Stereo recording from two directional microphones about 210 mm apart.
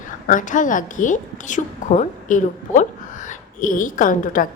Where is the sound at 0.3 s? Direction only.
40° left (ahead or behind).